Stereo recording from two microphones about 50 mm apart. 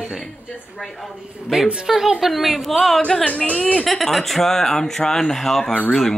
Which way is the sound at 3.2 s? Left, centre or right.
Left.